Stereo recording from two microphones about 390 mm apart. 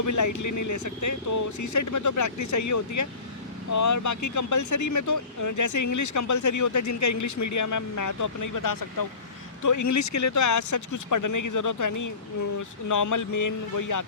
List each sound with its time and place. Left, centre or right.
0.0 s speech: left